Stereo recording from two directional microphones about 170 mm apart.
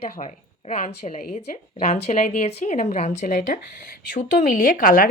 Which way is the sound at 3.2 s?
55° left (ahead or behind).